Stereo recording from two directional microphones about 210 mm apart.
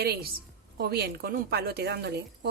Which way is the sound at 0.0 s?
50° right (ahead or behind).